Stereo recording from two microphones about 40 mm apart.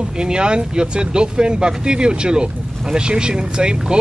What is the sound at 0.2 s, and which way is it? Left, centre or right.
Speech, right.